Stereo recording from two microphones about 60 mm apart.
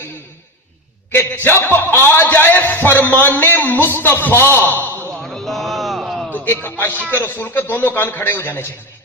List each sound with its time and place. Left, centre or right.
1.3 s a man's voice: left
4.6 s a man's voice: left
5.2 s a sound: centre
6.3 s a man's voice: left